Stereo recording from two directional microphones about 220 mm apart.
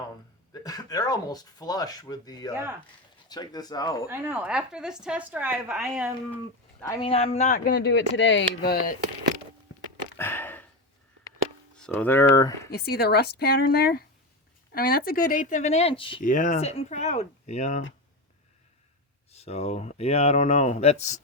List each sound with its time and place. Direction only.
0.5 s speech: 15° left (ahead or behind)
4.1 s a woman's voice: 10° right (ahead or behind)
7.0 s speech: 25° left (ahead or behind); by 9.0 s 45° left (ahead or behind)
10.2 s a sound: 10° left (ahead or behind)
11.7 s speech: 5° left (ahead or behind)
12.7 s speech: 45° left (ahead or behind); by 16.2 s 25° left (ahead or behind)
16.2 s speech: 35° left (ahead or behind)
19.3 s speech: 30° left (ahead or behind)